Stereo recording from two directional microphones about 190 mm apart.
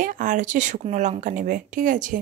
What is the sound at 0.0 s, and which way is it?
A woman's voice, 45° right (ahead or behind).